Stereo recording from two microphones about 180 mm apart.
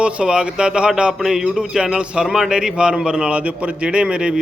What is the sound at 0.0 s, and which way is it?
Speech, 5° right (ahead or behind).